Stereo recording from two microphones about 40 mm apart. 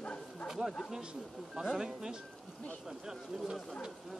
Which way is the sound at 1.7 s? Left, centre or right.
Centre.